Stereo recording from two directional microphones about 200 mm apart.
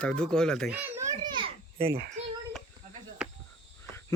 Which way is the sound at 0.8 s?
20° right (ahead or behind).